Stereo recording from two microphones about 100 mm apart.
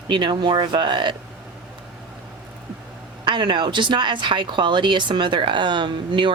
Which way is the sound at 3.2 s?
55° right (ahead or behind).